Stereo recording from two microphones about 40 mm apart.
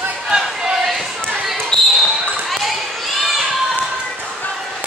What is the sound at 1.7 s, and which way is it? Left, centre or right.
Basketball bounce, left.